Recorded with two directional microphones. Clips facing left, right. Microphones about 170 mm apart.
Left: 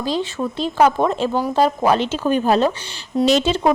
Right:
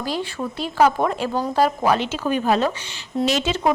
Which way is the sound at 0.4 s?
5° left (ahead or behind).